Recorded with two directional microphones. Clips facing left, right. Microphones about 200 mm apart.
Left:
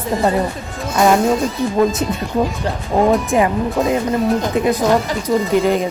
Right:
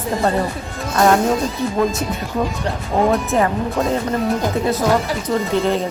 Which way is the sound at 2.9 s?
10° left (ahead or behind).